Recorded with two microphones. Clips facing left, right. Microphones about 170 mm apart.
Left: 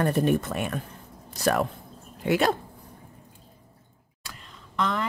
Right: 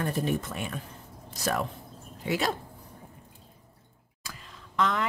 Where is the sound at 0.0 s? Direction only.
60° left (ahead or behind).